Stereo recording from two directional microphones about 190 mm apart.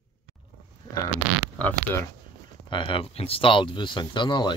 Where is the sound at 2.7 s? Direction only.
25° left (ahead or behind).